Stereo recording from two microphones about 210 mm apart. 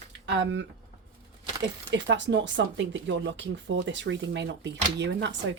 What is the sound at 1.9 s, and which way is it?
Speech, 60° right (ahead or behind).